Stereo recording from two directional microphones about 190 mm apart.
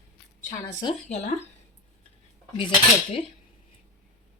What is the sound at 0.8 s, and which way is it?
Speech, 30° left (ahead or behind).